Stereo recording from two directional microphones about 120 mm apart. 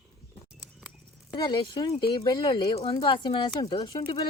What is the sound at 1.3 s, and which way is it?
Speech, 40° left (ahead or behind).